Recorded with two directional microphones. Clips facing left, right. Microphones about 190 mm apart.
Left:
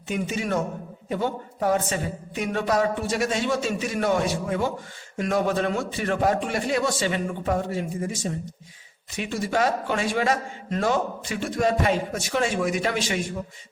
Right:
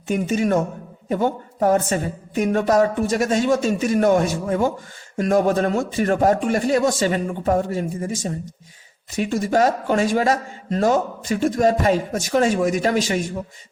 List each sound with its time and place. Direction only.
0.1 s a man's voice: 45° right (ahead or behind)